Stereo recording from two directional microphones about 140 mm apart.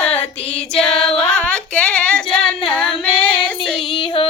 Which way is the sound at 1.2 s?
5° left (ahead or behind).